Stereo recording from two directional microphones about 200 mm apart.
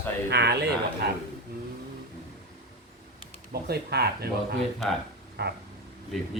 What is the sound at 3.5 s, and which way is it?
A man's voice, 55° right (ahead or behind).